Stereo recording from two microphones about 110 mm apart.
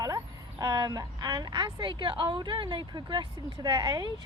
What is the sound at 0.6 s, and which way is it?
A woman's voice, 35° right (ahead or behind).